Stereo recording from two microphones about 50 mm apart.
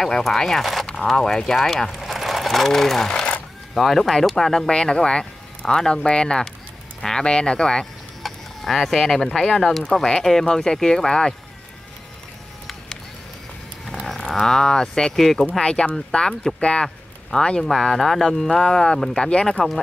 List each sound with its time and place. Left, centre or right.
0.0 s speech: centre
3.1 s sewing machine: centre
3.7 s speech: centre
7.8 s speech: centre
13.8 s livestock: centre
14.4 s speech: centre
15.1 s speech: centre
15.6 s speech: centre